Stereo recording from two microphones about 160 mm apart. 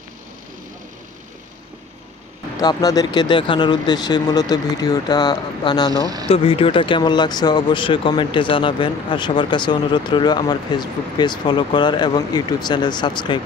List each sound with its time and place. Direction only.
2.6 s speech: 25° left (ahead or behind)
6.2 s speech: 35° left (ahead or behind)